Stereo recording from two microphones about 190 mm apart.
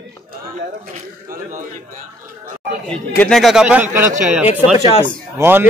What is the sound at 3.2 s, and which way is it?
Speech, centre (ahead or behind).